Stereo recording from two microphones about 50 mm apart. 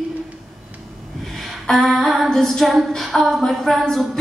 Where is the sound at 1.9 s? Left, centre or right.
Centre.